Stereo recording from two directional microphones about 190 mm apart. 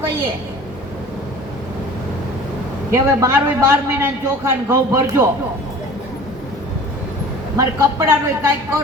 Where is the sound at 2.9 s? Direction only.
15° right (ahead or behind).